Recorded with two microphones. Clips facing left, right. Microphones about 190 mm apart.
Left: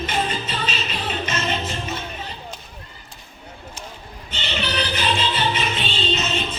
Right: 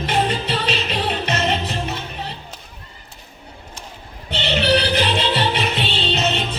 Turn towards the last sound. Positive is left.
turn(degrees=-65)  # may be behind; listen again after turning